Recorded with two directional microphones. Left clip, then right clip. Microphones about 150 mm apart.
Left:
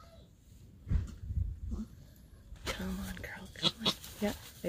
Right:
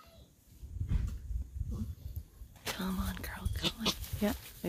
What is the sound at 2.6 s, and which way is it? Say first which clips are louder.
Whispering: right 1 dB; 35° right (ahead or behind).